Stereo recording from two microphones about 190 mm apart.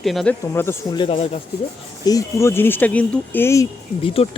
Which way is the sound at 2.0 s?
15° left (ahead or behind).